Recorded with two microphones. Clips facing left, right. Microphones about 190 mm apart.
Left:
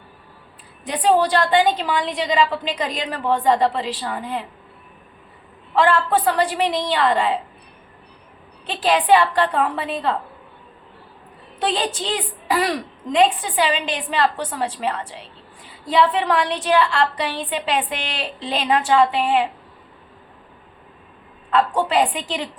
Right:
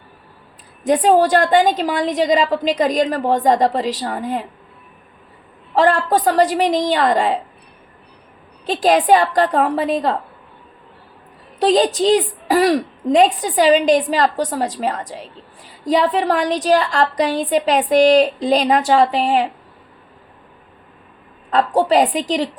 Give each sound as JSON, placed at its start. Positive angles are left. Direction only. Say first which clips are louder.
{"t": 0.9, "sound": "a woman's voice", "louder": "right 5 dB", "side_deg": -45}
{"t": 5.7, "sound": "a woman's voice", "louder": "right 3 dB", "side_deg": -40}
{"t": 8.6, "sound": "a woman's voice", "louder": "right 5 dB", "side_deg": -40}
{"t": 11.6, "sound": "a woman's voice", "louder": "right 9 dB", "side_deg": -40}
{"t": 21.5, "sound": "a woman's voice", "louder": "right 4 dB", "side_deg": -40}